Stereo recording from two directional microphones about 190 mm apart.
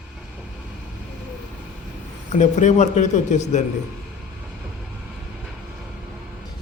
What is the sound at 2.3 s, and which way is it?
A man's voice, 40° left (ahead or behind).